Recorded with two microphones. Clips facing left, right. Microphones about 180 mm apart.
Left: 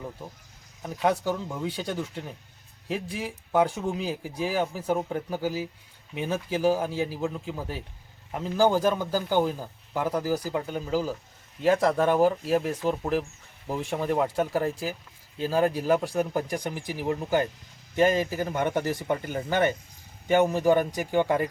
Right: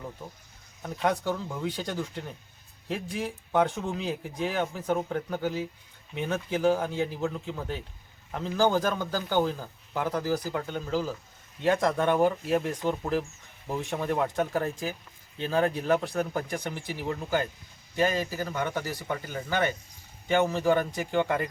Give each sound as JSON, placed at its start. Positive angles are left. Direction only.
{"t": 0.8, "sound": "a man's voice", "side_deg": 5}